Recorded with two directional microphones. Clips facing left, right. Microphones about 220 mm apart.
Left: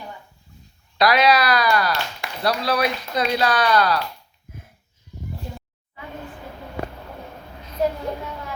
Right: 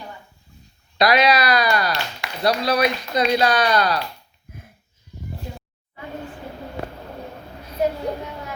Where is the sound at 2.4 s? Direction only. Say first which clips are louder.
Right 2 dB; 20° right (ahead or behind).